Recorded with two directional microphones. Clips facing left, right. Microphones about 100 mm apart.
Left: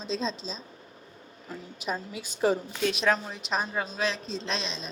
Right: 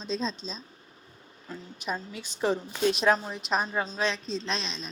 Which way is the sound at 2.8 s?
35° right (ahead or behind).